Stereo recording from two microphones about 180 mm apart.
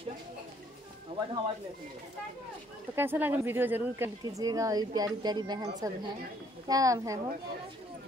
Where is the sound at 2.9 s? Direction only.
10° right (ahead or behind).